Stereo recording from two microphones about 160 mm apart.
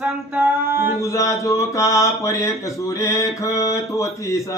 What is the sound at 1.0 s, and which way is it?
Speech, 20° left (ahead or behind).